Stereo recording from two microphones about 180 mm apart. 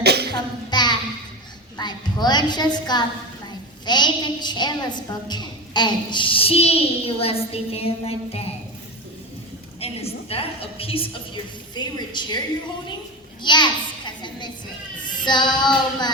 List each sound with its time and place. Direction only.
0.0 s a sound: 65° right (ahead or behind)
0.7 s music: 25° left (ahead or behind)
1.8 s a woman's voice: 25° left (ahead or behind)
9.8 s a woman's voice: 35° left (ahead or behind)
13.4 s a sound: 25° left (ahead or behind)
15.0 s child singing: 25° left (ahead or behind)